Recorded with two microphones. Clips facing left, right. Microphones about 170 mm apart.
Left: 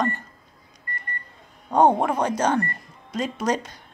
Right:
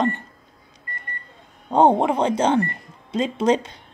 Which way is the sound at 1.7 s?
25° right (ahead or behind).